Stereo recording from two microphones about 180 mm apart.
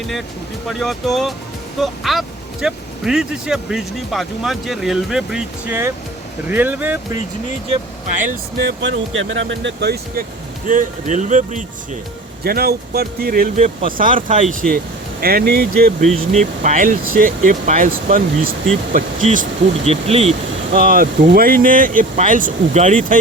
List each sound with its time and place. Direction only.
0.7 s speech: centre (ahead or behind)
8.1 s speech: 45° right (ahead or behind)
8.5 s speech: 75° right (ahead or behind)
10.7 s speech: 45° right (ahead or behind)
12.4 s speech: 60° right (ahead or behind)
15.2 s speech: 55° right (ahead or behind)
16.0 s speech: 40° right (ahead or behind)
20.7 s speech: 50° right (ahead or behind)